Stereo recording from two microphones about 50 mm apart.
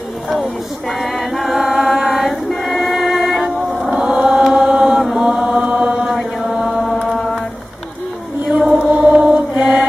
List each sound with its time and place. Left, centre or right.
1.0 s mantra: centre
1.6 s chant: centre
2.0 s choir: centre
3.9 s chant: right
5.4 s chant: right
7.1 s a sound: centre
8.5 s chant: right